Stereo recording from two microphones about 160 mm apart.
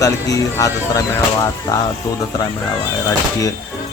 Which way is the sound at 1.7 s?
25° left (ahead or behind).